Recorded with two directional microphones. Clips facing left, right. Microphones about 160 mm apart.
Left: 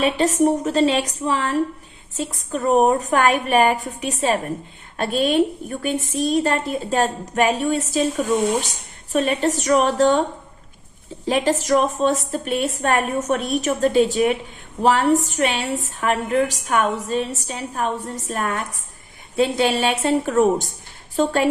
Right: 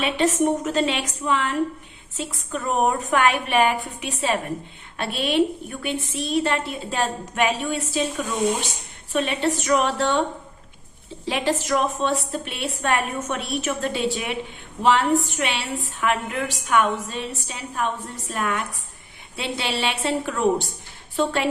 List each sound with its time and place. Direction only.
0.0 s a woman's voice: 40° left (ahead or behind)
9.1 s a woman's voice: 40° left (ahead or behind)
11.3 s a woman's voice: 40° left (ahead or behind)